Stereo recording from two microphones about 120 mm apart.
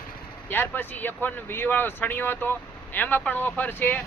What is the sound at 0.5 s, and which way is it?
Speech, 15° left (ahead or behind).